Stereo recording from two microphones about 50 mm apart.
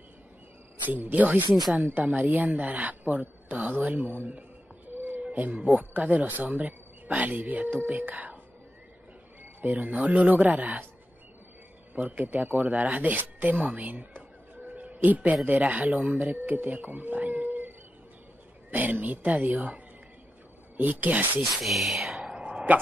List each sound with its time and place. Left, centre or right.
0.8 s speech: right
4.3 s a sound: right
5.3 s speech: right
9.4 s speech: right
11.9 s speech: right
21.5 s a sound: centre; by 22.7 s right